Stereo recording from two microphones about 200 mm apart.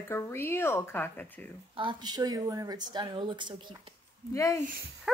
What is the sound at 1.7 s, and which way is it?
Speech, 25° right (ahead or behind).